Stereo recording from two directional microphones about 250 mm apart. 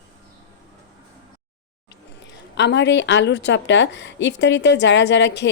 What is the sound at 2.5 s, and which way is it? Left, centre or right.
A woman's voice, left.